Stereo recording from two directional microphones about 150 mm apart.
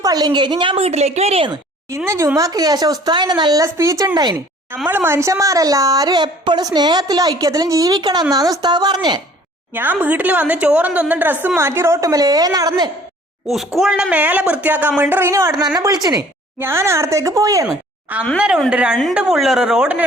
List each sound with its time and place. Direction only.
0.0 s a woman's voice: 25° right (ahead or behind); by 1.5 s 45° right (ahead or behind)
2.0 s a woman's voice: 20° right (ahead or behind)
4.9 s a woman's voice: 15° right (ahead or behind)
9.7 s a woman's voice: 10° right (ahead or behind); by 12.9 s 25° right (ahead or behind)
13.7 s a woman's voice: 5° right (ahead or behind); by 17.7 s 20° right (ahead or behind)
18.3 s a woman's voice: 5° right (ahead or behind)